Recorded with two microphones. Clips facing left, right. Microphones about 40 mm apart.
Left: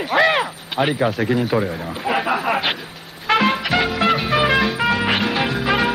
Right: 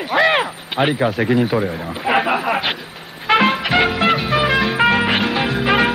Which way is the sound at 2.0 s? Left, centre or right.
Centre.